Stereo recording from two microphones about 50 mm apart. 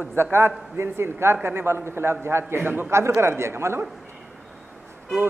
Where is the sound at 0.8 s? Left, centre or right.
Right.